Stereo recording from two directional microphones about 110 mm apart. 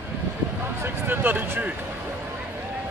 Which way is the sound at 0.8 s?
20° right (ahead or behind).